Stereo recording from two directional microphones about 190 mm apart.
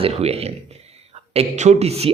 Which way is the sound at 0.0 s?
35° right (ahead or behind).